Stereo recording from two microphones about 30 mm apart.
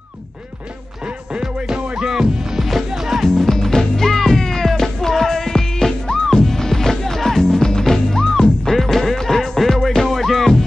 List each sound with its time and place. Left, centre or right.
2.0 s music: centre
2.3 s music: right
3.3 s music: centre